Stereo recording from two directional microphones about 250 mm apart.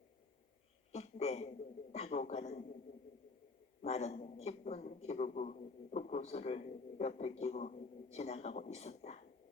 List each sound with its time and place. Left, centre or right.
0.9 s a man's voice: left
3.8 s a man's voice: left